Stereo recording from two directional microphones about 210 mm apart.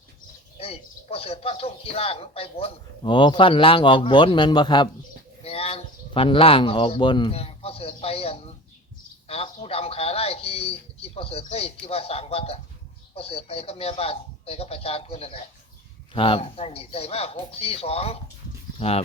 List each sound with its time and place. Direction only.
0.6 s speech: 30° left (ahead or behind)